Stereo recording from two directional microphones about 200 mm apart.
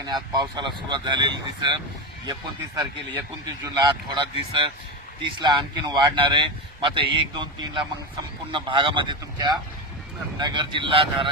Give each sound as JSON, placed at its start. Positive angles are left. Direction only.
{"t": 0.0, "sound": "speech", "side_deg": -20}
{"t": 3.8, "sound": "speech", "side_deg": -20}